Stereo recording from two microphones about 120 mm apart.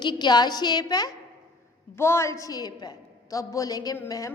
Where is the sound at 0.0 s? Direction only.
40° left (ahead or behind).